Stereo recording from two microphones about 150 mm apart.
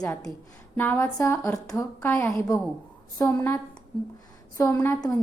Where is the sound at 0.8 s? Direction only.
10° left (ahead or behind).